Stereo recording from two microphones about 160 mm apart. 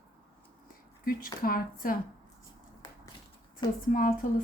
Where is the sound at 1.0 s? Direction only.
60° left (ahead or behind).